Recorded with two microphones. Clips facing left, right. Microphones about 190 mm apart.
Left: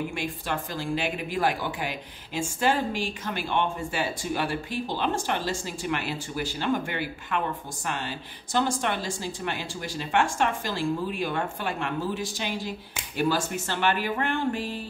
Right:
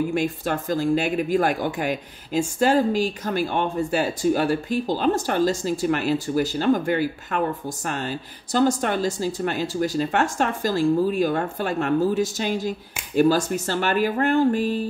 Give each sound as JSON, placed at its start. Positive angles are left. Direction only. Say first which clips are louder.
{"t": 0.1, "sound": "speech", "louder": "right 7 dB", "side_deg": -45}